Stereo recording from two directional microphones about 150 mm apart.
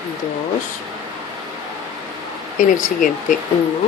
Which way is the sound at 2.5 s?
60° left (ahead or behind).